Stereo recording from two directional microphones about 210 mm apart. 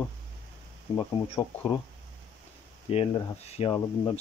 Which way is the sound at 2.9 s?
30° left (ahead or behind).